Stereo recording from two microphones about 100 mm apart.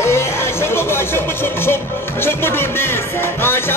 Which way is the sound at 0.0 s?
25° left (ahead or behind).